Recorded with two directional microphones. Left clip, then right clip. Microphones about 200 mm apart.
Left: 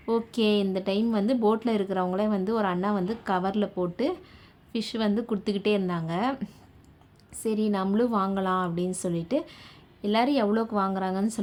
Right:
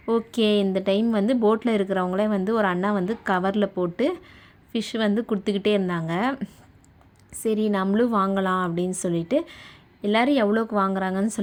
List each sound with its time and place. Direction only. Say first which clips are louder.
0.0 s speech: right 3 dB; 20° right (ahead or behind)